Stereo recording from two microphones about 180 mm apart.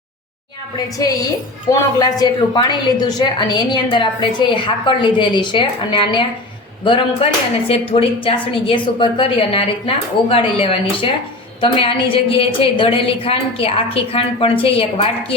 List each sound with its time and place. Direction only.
0.9 s a woman's voice: 20° left (ahead or behind)